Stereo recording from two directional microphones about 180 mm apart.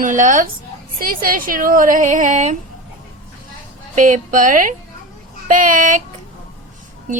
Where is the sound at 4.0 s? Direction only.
45° right (ahead or behind).